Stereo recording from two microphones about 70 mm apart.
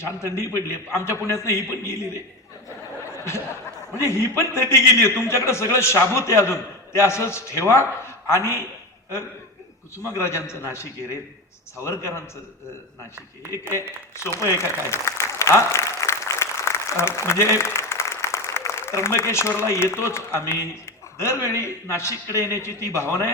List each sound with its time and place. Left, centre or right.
0.0 s a man's voice: left
4.0 s a man's voice: left
10.2 s a man's voice: left
14.4 s a man's voice: left